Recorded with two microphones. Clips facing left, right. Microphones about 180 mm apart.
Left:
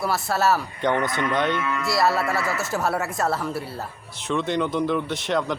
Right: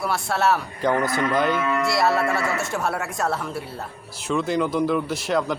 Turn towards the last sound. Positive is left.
turn(degrees=-5)  # may be behind; listen again after turning